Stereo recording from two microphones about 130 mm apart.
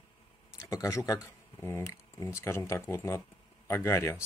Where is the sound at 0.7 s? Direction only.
25° left (ahead or behind).